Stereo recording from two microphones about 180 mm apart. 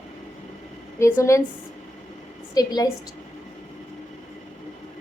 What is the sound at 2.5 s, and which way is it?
Speech, 20° left (ahead or behind).